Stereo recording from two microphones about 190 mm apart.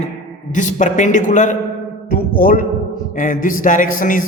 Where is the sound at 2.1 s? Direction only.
45° left (ahead or behind).